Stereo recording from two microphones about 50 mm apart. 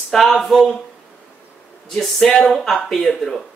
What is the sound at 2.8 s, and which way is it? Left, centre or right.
Speech, centre.